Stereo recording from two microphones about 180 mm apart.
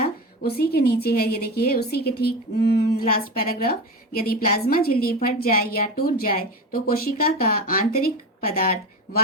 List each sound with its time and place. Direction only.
0.0 s a woman's voice: 60° left (ahead or behind)